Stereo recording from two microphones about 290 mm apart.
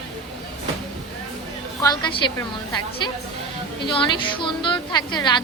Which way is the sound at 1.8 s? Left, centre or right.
Centre.